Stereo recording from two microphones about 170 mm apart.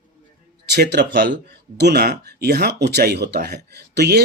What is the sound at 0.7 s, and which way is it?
Speech, 75° right (ahead or behind).